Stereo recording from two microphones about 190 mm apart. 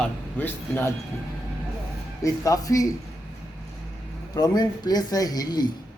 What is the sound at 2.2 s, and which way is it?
Speech, 15° left (ahead or behind).